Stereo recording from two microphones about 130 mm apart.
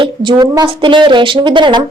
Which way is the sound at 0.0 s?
35° right (ahead or behind).